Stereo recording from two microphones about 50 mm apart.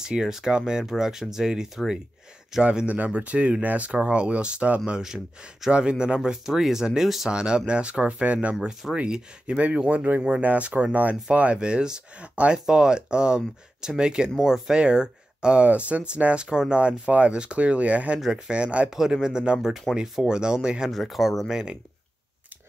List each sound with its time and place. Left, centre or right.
0.0 s speech: centre
2.9 s speech: right
5.0 s speech: centre
7.2 s speech: centre
18.9 s speech: centre
20.9 s speech: centre